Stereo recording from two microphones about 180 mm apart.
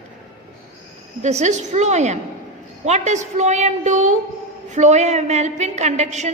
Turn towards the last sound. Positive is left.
turn(degrees=-40)  # may be behind; listen again after turning